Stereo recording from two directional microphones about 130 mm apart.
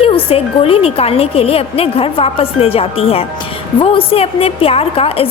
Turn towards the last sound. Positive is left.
turn(degrees=45)  # may be behind; listen again after turning